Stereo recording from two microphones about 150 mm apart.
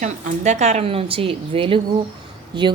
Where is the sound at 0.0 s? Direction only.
55° right (ahead or behind).